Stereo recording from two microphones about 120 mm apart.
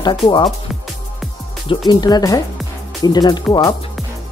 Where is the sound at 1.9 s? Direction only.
35° left (ahead or behind).